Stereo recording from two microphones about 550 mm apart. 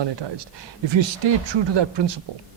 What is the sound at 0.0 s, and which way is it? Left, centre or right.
Speech, right.